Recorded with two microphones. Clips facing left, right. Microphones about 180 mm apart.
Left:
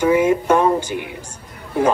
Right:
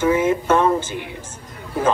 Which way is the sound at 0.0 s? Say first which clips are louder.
Left 2 dB; 15° left (ahead or behind).